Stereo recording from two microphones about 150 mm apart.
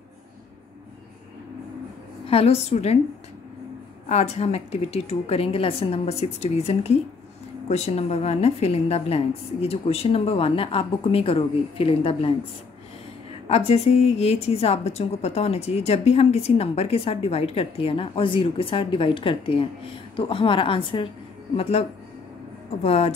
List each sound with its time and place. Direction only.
2.2 s a woman's voice: 40° left (ahead or behind)
4.1 s a woman's voice: 45° left (ahead or behind)
13.5 s a woman's voice: 45° left (ahead or behind)
22.8 s a woman's voice: 45° left (ahead or behind)